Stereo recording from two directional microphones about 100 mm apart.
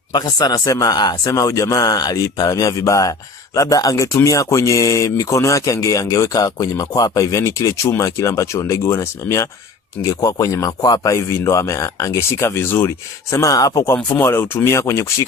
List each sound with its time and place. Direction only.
0.1 s a man's voice: 45° left (ahead or behind); by 12.9 s 25° left (ahead or behind)
13.3 s a man's voice: 35° left (ahead or behind)
13.9 s speech: 20° left (ahead or behind)